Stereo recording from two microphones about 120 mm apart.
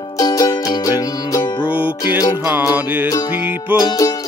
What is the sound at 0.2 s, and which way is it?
Music, 30° left (ahead or behind).